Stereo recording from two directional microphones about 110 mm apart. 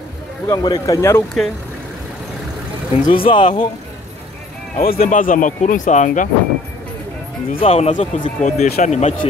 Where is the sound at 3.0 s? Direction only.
50° left (ahead or behind).